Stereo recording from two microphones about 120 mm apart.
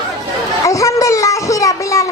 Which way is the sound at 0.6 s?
25° left (ahead or behind).